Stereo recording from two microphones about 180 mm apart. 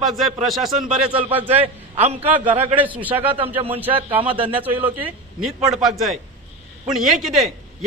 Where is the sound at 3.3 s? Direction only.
30° right (ahead or behind).